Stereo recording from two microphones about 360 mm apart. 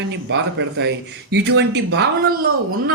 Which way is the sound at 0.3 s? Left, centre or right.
Right.